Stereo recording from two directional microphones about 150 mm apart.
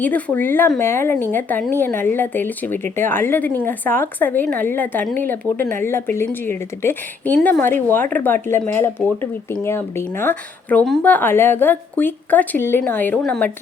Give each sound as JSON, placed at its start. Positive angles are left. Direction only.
{"t": 0.0, "sound": "a woman's voice", "side_deg": 10}